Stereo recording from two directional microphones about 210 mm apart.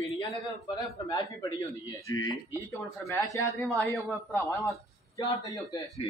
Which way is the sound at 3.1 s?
15° left (ahead or behind).